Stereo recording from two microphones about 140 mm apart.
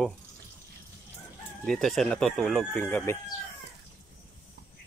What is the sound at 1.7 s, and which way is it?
Speech, 5° left (ahead or behind).